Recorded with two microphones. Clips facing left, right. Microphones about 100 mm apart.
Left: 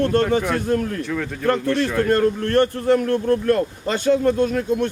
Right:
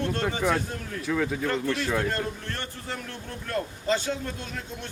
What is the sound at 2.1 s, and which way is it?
A man's voice, 60° left (ahead or behind).